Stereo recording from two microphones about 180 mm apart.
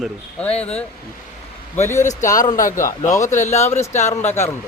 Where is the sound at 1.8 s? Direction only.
40° left (ahead or behind).